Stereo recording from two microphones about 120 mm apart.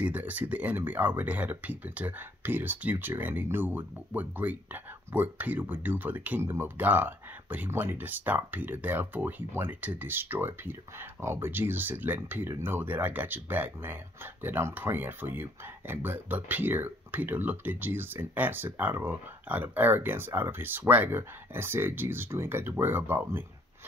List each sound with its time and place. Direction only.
0.0 s speech: 15° right (ahead or behind)